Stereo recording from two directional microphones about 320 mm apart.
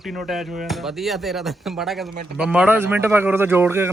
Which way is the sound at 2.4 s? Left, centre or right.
Centre.